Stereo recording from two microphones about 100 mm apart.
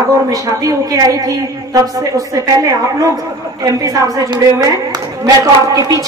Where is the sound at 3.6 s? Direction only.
35° right (ahead or behind).